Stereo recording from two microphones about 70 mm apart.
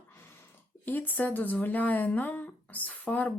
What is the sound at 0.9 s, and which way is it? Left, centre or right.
Speech, left.